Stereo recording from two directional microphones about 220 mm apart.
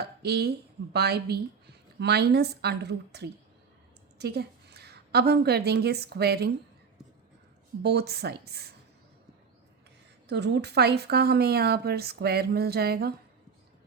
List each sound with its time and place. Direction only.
0.0 s a woman's voice: 45° right (ahead or behind)
7.8 s speech: 50° right (ahead or behind)
10.2 s speech: 50° right (ahead or behind)